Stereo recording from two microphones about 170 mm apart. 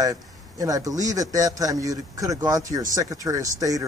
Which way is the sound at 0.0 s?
20° right (ahead or behind).